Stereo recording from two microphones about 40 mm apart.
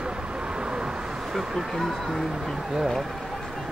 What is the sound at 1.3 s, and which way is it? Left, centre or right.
Speech, centre.